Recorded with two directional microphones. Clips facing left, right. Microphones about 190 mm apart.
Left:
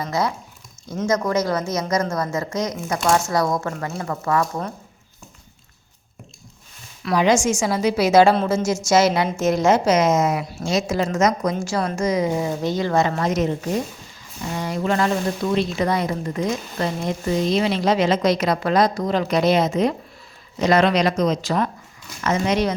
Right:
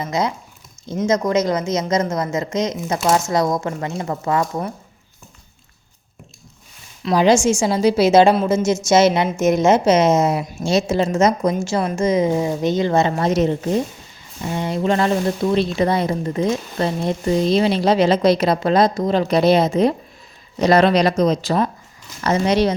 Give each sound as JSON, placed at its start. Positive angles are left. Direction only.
{"t": 0.0, "sound": "a woman's voice", "side_deg": -20}
{"t": 7.0, "sound": "a woman's voice", "side_deg": -30}
{"t": 14.5, "sound": "a woman's voice", "side_deg": -25}